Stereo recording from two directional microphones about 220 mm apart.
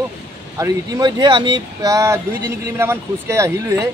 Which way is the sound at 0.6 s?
15° right (ahead or behind).